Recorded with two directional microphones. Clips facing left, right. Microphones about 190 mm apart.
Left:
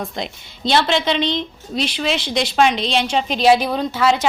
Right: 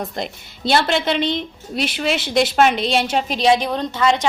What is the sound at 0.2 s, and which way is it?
A woman's voice, 5° right (ahead or behind).